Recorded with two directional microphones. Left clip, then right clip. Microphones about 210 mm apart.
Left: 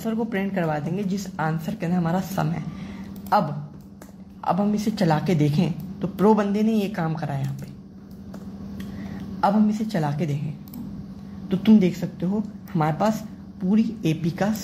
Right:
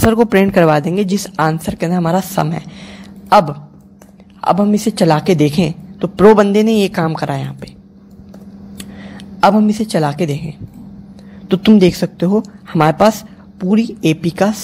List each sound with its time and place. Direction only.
0.1 s a woman's voice: 55° right (ahead or behind)
9.4 s a woman's voice: 45° right (ahead or behind)
11.4 s a woman's voice: 50° right (ahead or behind)